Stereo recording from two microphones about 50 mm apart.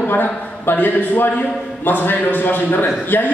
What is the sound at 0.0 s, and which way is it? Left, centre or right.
A man's voice, left.